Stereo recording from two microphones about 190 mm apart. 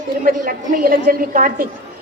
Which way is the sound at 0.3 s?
45° right (ahead or behind).